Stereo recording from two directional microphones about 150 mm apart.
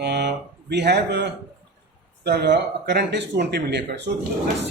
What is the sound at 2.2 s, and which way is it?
Speech, 90° right.